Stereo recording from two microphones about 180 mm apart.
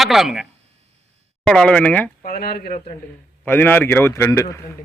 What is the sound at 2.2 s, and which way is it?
Speech, 55° left (ahead or behind).